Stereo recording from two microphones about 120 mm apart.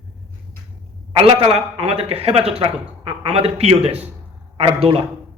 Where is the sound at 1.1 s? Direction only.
55° right (ahead or behind).